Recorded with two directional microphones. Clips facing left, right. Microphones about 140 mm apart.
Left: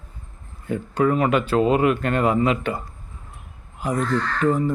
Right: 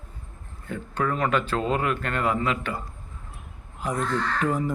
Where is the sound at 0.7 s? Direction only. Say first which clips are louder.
Left 7 dB; 15° left (ahead or behind).